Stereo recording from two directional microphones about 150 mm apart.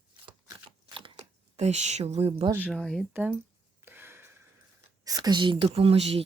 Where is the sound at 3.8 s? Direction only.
15° right (ahead or behind).